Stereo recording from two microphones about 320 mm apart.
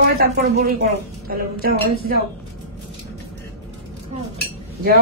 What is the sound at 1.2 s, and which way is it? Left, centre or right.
A woman's voice, right.